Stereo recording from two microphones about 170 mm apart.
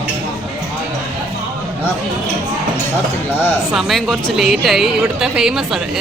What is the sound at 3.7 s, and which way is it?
A woman's voice, centre (ahead or behind).